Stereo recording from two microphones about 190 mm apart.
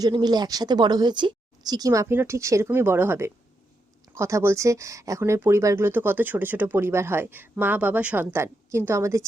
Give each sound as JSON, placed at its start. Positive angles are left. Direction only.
{"t": 0.0, "sound": "speech", "side_deg": -20}